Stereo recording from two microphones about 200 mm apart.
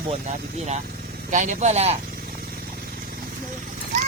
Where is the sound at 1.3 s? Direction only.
40° right (ahead or behind).